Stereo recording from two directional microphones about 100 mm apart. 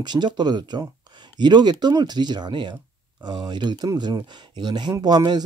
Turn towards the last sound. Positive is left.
turn(degrees=-45)  # may be behind; listen again after turning